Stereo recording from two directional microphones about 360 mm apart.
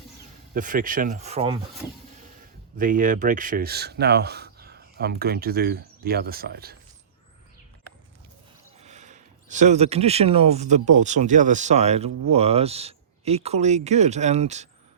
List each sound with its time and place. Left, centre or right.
0.5 s speech: right
2.7 s speech: right
8.8 s speech: centre